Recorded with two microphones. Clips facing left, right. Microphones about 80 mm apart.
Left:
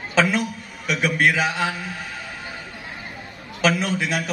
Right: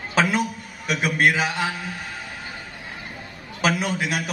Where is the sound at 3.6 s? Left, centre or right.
Centre.